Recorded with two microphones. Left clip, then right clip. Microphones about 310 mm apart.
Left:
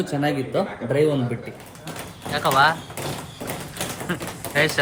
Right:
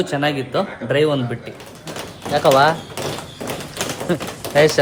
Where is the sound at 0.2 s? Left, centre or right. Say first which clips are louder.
Right 3 dB; right.